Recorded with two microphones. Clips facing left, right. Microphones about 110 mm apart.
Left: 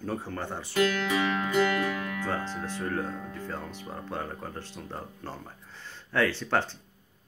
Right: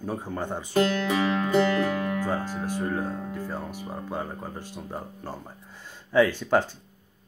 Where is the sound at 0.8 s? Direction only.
35° right (ahead or behind).